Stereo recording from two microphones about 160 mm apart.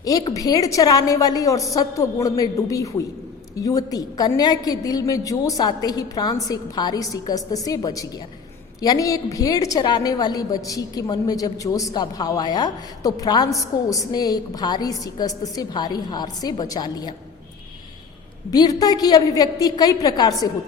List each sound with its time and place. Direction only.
0.0 s a woman's voice: 25° left (ahead or behind)
18.5 s a woman's voice: 25° left (ahead or behind)